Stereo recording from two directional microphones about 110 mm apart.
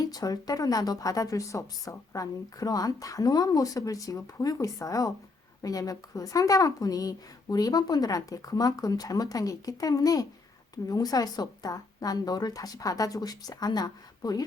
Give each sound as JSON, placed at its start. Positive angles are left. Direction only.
{"t": 0.0, "sound": "speech", "side_deg": 35}